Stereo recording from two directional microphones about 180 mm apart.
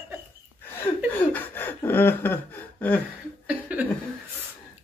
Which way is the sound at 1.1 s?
10° left (ahead or behind).